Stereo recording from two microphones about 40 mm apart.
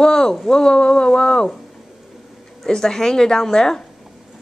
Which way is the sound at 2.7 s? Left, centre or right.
Centre.